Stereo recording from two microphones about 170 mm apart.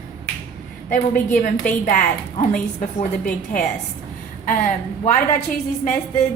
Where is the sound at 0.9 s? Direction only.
50° left (ahead or behind).